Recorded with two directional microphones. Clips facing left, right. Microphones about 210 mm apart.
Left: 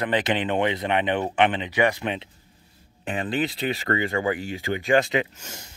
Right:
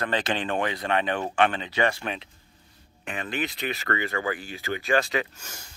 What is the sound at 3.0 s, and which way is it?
Speech, 30° left (ahead or behind).